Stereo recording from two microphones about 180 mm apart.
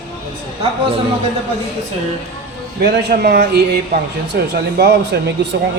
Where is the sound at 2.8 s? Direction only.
65° right (ahead or behind).